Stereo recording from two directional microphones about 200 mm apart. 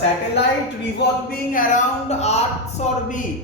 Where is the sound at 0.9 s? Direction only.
45° left (ahead or behind).